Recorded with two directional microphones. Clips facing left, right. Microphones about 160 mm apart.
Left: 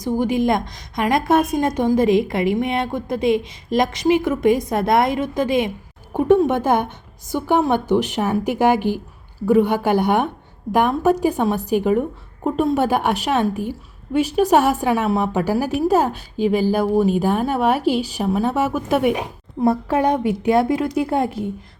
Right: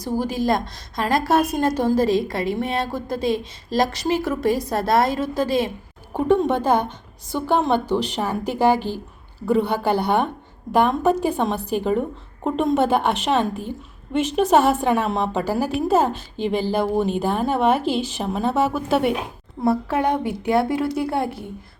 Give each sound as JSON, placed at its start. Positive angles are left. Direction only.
{"t": 0.2, "sound": "a woman's voice", "side_deg": 20}